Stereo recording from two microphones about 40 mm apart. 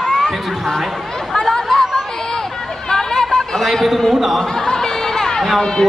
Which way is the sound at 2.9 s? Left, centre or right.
Centre.